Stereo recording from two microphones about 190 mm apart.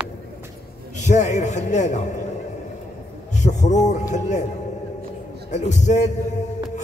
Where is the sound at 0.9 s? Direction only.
40° left (ahead or behind).